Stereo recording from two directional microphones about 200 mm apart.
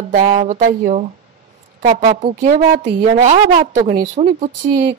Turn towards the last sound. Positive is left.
turn(degrees=-40)  # may be behind; listen again after turning